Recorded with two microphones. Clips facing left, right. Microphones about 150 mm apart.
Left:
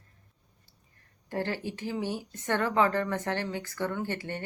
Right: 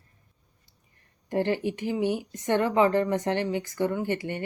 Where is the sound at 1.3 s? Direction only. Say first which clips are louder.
Right 6 dB; 15° right (ahead or behind).